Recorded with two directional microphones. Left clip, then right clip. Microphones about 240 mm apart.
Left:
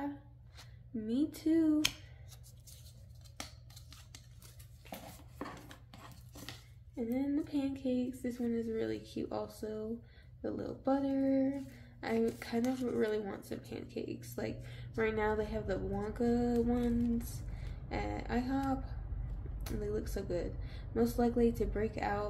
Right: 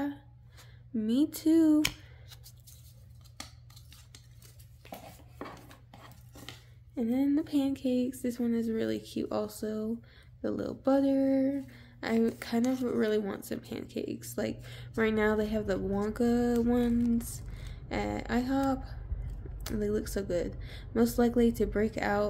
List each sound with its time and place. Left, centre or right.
0.9 s speech: right
5.4 s chopping: centre
7.0 s speech: right